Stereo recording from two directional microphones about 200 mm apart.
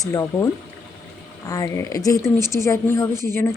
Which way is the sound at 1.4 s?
15° left (ahead or behind).